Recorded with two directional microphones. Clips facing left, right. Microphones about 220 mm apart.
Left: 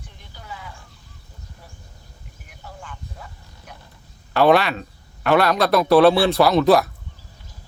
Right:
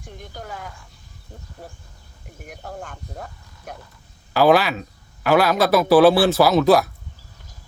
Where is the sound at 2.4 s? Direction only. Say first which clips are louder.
Right 7 dB; 50° right (ahead or behind).